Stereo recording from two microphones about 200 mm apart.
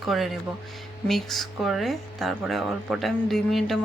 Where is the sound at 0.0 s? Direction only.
Centre (ahead or behind).